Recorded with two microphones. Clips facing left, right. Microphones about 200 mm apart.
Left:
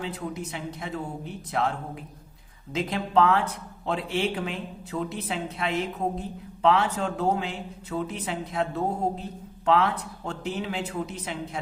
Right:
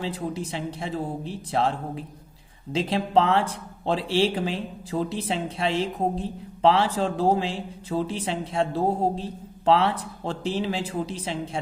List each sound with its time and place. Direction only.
0.0 s speech: 30° right (ahead or behind)